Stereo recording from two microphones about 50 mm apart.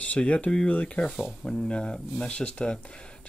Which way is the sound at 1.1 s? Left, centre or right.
Centre.